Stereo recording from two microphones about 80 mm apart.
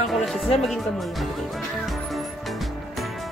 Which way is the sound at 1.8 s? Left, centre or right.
Centre.